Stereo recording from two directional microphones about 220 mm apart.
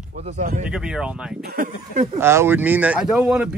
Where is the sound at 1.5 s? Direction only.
40° right (ahead or behind).